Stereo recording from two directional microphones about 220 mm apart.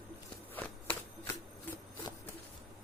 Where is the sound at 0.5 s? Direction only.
10° left (ahead or behind).